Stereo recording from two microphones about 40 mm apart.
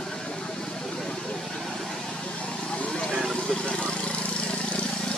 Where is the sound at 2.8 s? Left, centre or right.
Left.